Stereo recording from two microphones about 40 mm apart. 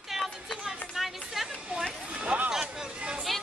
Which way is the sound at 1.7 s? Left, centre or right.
Right.